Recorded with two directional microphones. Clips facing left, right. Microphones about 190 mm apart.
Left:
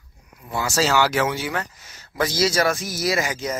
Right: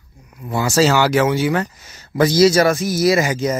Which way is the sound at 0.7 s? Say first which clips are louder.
Right 5 dB; 5° right (ahead or behind).